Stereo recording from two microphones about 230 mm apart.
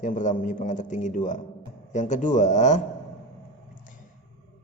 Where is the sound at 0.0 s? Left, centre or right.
Left.